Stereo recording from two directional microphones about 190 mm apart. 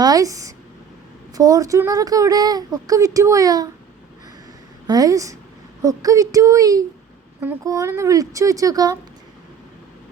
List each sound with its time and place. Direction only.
0.0 s a sound: 20° right (ahead or behind)
1.3 s speech: 20° right (ahead or behind)
4.9 s speech: 20° right (ahead or behind)